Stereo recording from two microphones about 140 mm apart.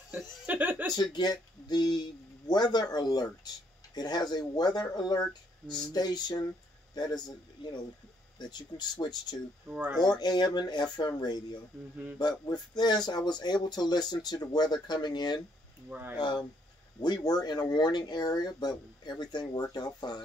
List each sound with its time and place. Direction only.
0.1 s speech: 15° right (ahead or behind)
1.1 s speech: 30° left (ahead or behind)
9.7 s speech: 15° right (ahead or behind)
10.0 s speech: 30° left (ahead or behind)
15.9 s speech: 15° right (ahead or behind)
17.0 s speech: 30° left (ahead or behind)